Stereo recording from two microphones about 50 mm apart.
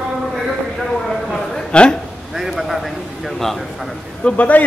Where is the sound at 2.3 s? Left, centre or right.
Centre.